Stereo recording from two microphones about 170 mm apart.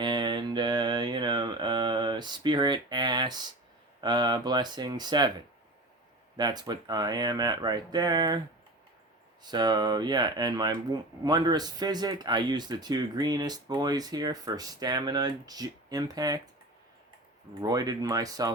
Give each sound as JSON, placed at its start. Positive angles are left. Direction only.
{"t": 0.0, "sound": "mantra", "side_deg": -25}
{"t": 4.0, "sound": "speech", "side_deg": -25}
{"t": 6.3, "sound": "speech", "side_deg": -25}
{"t": 9.4, "sound": "speech", "side_deg": -25}
{"t": 17.6, "sound": "speech", "side_deg": -20}